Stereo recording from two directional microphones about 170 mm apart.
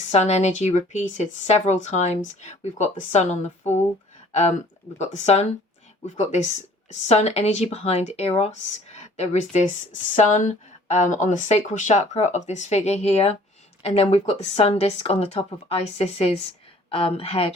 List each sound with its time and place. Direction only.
0.1 s speech: 40° left (ahead or behind)